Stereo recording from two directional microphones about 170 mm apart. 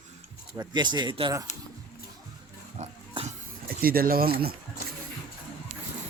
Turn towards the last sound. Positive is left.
turn(degrees=-60)  # may be behind; listen again after turning